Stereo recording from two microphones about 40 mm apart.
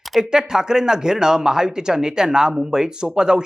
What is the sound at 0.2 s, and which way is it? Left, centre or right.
Speech, centre.